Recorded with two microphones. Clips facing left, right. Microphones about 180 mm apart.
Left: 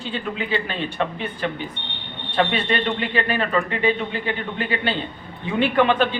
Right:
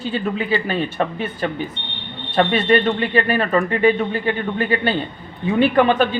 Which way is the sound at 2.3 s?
45° right (ahead or behind).